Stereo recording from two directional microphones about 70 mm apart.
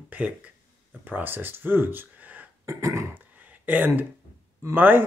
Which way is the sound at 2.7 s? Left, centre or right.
Right.